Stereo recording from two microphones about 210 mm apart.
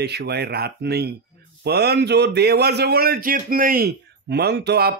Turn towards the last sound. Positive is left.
turn(degrees=-50)  # may be behind; listen again after turning